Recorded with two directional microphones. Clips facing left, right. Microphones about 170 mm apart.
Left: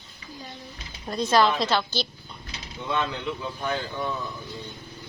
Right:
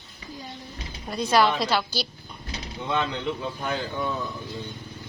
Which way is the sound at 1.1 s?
10° right (ahead or behind).